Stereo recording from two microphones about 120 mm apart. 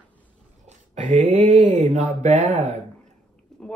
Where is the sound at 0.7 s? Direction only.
90° right; by 3.1 s 70° right (ahead or behind).